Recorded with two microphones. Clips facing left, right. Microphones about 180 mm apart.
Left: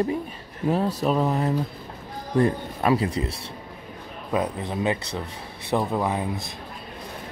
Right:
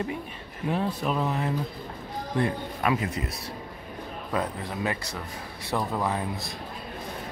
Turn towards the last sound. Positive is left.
turn(degrees=20)  # may be behind; listen again after turning